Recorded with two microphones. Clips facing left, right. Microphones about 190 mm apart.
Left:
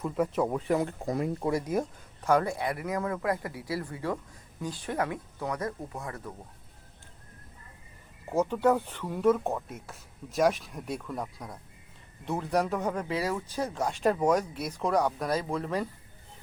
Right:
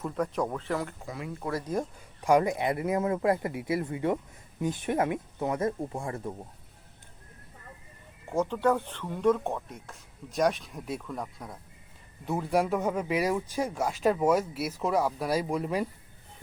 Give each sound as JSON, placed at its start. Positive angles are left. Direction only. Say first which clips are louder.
{"t": 0.0, "sound": "speech", "louder": "left 2 dB", "side_deg": 5}
{"t": 1.0, "sound": "speech", "louder": "left 8 dB", "side_deg": 40}
{"t": 1.5, "sound": "speech", "louder": "left 1 dB", "side_deg": 10}
{"t": 2.2, "sound": "speech", "louder": "right 2 dB", "side_deg": -15}
{"t": 8.3, "sound": "speech", "louder": "left 1 dB", "side_deg": 5}